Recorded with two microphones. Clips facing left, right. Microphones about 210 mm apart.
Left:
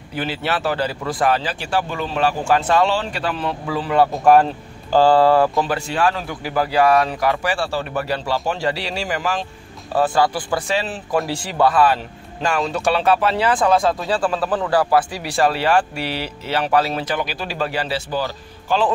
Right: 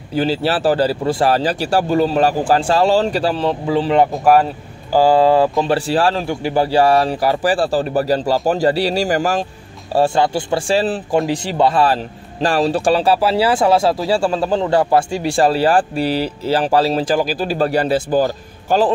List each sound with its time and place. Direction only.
0.1 s a man's voice: 30° right (ahead or behind)
4.1 s speech: 5° right (ahead or behind)
5.6 s a man's voice: 30° right (ahead or behind)
9.9 s speech: 25° right (ahead or behind)
11.1 s a man's voice: 20° right (ahead or behind); by 18.8 s 45° right (ahead or behind)